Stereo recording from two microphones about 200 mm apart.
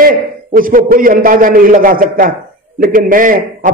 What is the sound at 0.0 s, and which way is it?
A man's voice, 45° right (ahead or behind).